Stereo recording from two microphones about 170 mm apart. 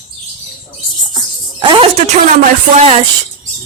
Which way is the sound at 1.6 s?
30° right (ahead or behind).